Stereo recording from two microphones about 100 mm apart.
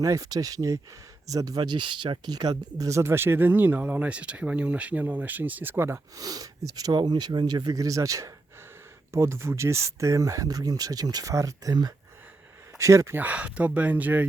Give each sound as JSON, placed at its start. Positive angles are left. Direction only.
{"t": 0.0, "sound": "speech", "side_deg": -35}
{"t": 6.1, "sound": "speech", "side_deg": -35}
{"t": 12.7, "sound": "speech", "side_deg": -30}
{"t": 13.1, "sound": "speech", "side_deg": -15}